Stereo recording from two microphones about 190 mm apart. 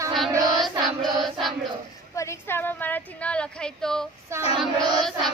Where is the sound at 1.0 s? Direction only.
Centre (ahead or behind).